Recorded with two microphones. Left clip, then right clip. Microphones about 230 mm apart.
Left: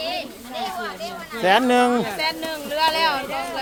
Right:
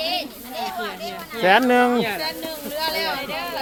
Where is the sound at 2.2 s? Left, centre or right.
Left.